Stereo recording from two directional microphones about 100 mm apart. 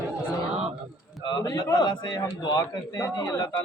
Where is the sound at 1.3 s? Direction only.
45° left (ahead or behind).